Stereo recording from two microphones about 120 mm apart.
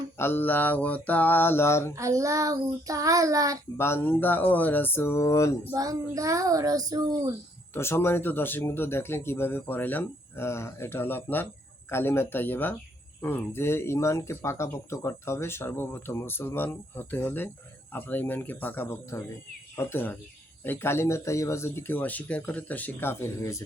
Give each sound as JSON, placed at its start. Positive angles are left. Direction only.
{"t": 0.2, "sound": "speech", "side_deg": 20}
{"t": 2.0, "sound": "child singing", "side_deg": -25}
{"t": 3.8, "sound": "speech", "side_deg": 20}
{"t": 5.7, "sound": "child singing", "side_deg": -30}
{"t": 7.7, "sound": "speech", "side_deg": 20}